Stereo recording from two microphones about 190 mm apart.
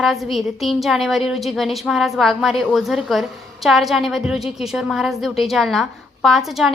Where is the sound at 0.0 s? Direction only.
Centre (ahead or behind).